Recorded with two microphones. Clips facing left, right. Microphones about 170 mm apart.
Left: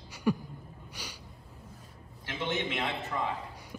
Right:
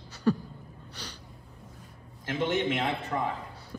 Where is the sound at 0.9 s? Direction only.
10° left (ahead or behind).